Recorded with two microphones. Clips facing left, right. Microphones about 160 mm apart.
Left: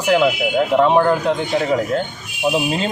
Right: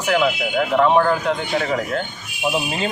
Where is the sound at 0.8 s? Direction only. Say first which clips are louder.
Left 1 dB; 30° left (ahead or behind).